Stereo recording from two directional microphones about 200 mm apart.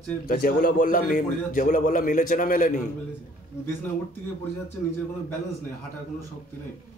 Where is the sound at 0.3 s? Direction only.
45° left (ahead or behind).